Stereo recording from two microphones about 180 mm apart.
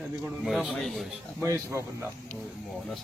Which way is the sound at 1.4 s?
15° right (ahead or behind).